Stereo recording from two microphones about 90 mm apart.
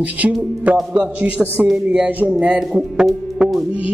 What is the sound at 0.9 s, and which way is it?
Speech, 20° right (ahead or behind).